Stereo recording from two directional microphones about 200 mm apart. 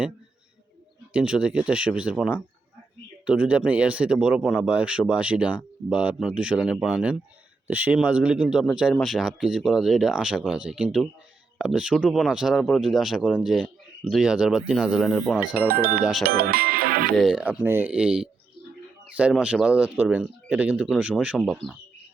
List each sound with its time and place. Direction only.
1.1 s speech: 5° right (ahead or behind)
15.6 s speech: 50° right (ahead or behind)
17.2 s speech: 5° right (ahead or behind)